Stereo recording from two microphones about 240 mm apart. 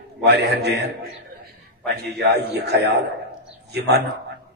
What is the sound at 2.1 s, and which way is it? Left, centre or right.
A man's voice, right.